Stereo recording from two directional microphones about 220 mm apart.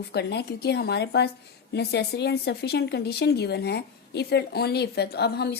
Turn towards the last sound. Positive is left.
turn(degrees=50)  # may be behind; listen again after turning